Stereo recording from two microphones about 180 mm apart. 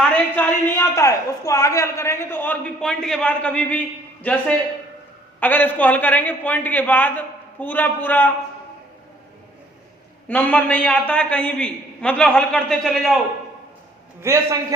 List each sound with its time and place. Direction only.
0.1 s a man's voice: 10° left (ahead or behind)
10.2 s a man's voice: 10° left (ahead or behind)
14.2 s a man's voice: 15° right (ahead or behind)